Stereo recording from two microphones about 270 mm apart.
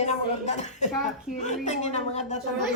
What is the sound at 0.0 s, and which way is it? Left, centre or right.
Speech, left.